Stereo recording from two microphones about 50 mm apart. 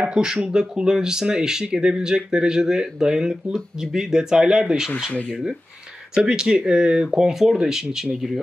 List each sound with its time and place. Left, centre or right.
0.0 s speech: centre
6.1 s speech: centre